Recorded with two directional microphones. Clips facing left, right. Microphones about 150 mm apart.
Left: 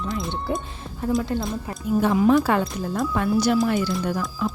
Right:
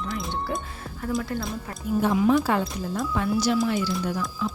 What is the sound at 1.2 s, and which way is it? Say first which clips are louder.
Speech: left 4 dB; 20° left (ahead or behind).